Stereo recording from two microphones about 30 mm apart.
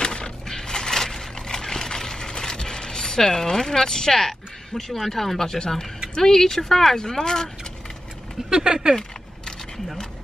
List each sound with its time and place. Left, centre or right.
0.0 s crushing: left
0.6 s a sound: centre
5.0 s speech: centre
8.5 s speech: right